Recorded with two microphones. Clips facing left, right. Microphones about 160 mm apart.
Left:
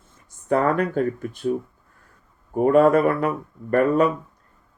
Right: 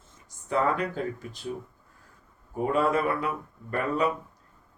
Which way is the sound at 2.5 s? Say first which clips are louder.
Left 9 dB; 50° left (ahead or behind).